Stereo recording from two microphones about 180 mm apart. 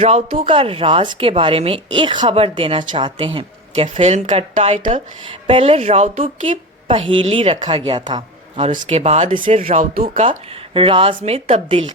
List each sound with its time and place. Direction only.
0.0 s speech: 35° right (ahead or behind)
5.3 s speech: 30° right (ahead or behind)